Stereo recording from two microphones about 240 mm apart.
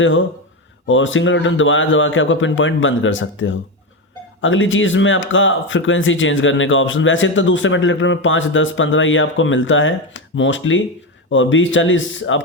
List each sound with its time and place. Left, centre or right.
0.0 s speech: left